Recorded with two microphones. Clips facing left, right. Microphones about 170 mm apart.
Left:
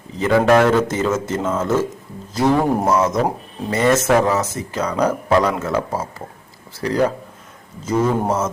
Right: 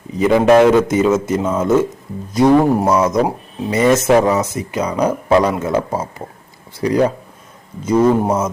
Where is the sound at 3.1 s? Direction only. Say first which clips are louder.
Right 3 dB; 15° right (ahead or behind).